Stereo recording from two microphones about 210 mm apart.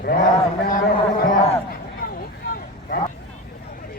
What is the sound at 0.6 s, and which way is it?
Speech, 40° left (ahead or behind).